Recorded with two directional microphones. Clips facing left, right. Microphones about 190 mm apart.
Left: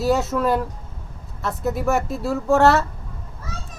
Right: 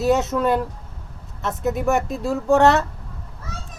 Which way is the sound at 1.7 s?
15° right (ahead or behind).